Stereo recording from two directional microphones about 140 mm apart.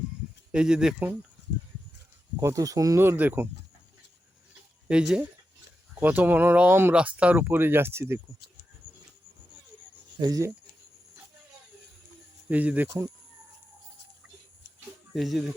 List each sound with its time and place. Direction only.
0.5 s speech: 5° right (ahead or behind)
2.4 s speech: 20° right (ahead or behind)
4.9 s speech: 5° right (ahead or behind)
10.2 s speech: 25° right (ahead or behind)
12.5 s speech: 10° right (ahead or behind)
15.1 s speech: centre (ahead or behind)